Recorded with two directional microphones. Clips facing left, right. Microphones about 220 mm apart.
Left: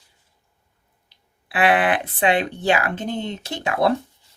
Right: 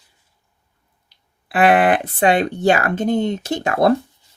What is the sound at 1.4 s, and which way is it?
Speech, 45° right (ahead or behind).